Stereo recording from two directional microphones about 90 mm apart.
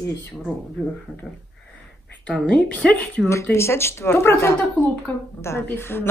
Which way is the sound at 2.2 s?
10° left (ahead or behind).